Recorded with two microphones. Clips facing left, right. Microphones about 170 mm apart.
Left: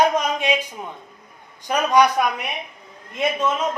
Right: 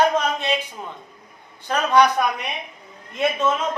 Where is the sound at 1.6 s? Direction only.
15° left (ahead or behind).